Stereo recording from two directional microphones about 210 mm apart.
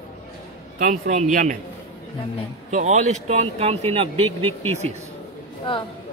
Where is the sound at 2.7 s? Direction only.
35° right (ahead or behind).